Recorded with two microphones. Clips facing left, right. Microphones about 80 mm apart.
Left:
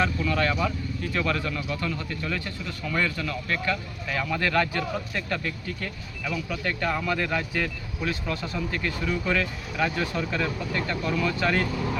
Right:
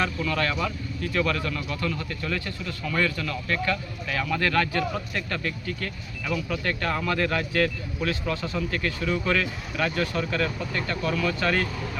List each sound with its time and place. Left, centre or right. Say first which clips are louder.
0.0 s speech: left 1 dB; centre
6.2 s speech: right 2 dB; centre